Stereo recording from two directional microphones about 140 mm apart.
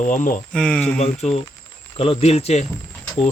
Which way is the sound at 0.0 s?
65° left (ahead or behind).